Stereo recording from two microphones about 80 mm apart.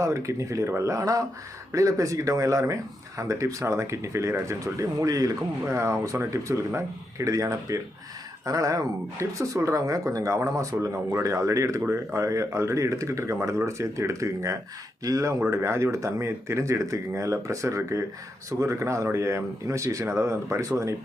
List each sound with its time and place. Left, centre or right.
0.0 s speech: right